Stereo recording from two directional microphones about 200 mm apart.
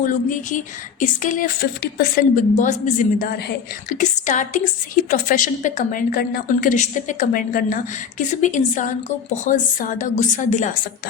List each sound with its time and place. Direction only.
0.0 s a woman's voice: 40° left (ahead or behind)